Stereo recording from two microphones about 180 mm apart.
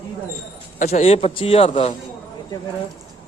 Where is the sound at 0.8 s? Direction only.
35° left (ahead or behind).